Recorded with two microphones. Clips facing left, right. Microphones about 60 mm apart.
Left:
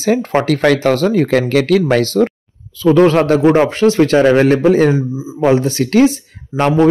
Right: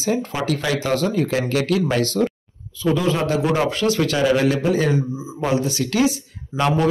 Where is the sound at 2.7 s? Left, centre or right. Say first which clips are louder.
Left 10 dB; left.